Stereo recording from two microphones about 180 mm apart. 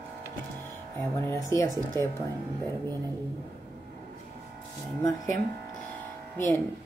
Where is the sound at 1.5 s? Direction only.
15° left (ahead or behind).